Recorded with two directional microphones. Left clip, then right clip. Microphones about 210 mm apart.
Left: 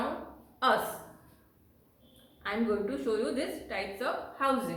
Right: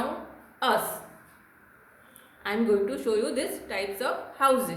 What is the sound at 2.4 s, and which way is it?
A woman's voice, 40° right (ahead or behind).